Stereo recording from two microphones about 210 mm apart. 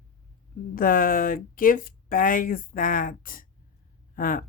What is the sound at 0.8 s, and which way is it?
Speech, 45° left (ahead or behind).